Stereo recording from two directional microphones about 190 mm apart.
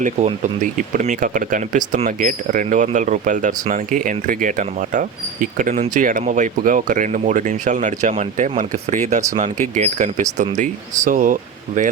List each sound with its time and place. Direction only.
0.0 s speech: 40° right (ahead or behind)